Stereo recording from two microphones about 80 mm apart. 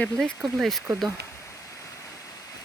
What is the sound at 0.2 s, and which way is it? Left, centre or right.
Speech, centre.